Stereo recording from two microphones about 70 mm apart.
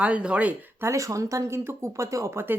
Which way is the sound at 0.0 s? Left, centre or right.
Centre.